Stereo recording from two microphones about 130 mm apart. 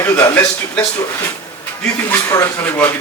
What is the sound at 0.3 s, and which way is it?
Speech, 25° left (ahead or behind).